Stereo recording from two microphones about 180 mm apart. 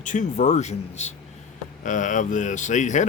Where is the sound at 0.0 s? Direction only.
45° left (ahead or behind).